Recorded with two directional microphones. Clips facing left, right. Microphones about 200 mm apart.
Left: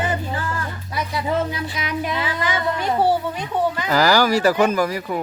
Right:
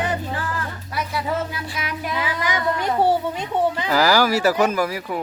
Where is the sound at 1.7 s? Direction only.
5° right (ahead or behind); by 3.8 s 20° right (ahead or behind).